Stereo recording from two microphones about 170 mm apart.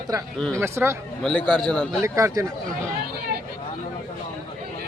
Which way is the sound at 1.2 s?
5° left (ahead or behind).